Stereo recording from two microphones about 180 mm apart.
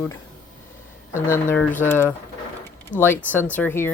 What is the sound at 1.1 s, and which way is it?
Speech, 15° left (ahead or behind).